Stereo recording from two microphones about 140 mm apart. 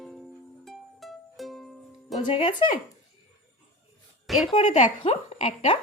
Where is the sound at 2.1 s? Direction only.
40° left (ahead or behind).